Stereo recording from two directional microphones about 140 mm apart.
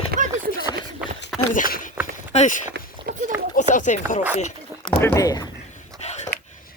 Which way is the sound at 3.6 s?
60° left (ahead or behind).